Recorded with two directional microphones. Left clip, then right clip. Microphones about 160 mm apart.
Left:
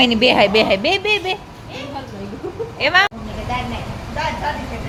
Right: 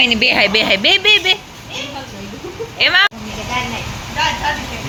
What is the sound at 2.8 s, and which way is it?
Speech, 10° left (ahead or behind).